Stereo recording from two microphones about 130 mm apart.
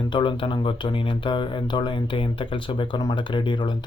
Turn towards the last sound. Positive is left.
turn(degrees=35)  # may be behind; listen again after turning